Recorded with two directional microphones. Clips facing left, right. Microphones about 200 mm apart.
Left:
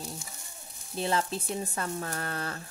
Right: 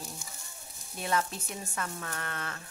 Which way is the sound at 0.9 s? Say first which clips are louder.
Left 3 dB; 30° left (ahead or behind).